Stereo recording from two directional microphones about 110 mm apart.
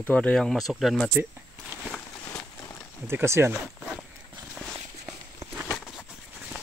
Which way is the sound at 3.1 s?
20° right (ahead or behind).